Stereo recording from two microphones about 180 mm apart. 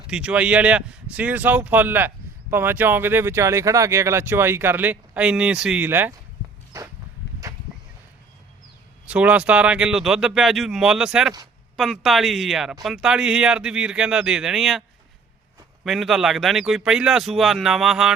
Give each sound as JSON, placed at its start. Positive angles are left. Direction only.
{"t": 0.1, "sound": "speech", "side_deg": -5}
{"t": 6.7, "sound": "a sound", "side_deg": -15}
{"t": 9.0, "sound": "a man's voice", "side_deg": -5}